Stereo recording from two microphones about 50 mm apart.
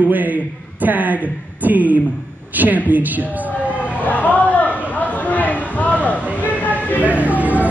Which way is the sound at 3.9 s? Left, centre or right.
Left.